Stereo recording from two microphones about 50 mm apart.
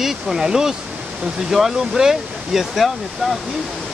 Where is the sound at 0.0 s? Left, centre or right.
Centre.